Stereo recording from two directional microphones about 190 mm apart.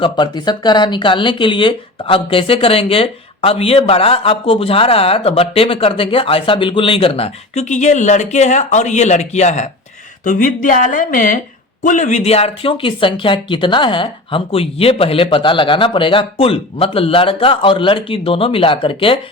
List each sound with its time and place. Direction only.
0.0 s speech: 25° left (ahead or behind)